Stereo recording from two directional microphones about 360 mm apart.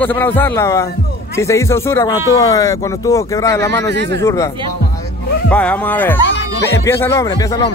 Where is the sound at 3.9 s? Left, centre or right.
Right.